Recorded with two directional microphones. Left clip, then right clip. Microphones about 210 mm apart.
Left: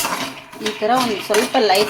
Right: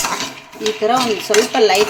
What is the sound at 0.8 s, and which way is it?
Dishes, 10° right (ahead or behind).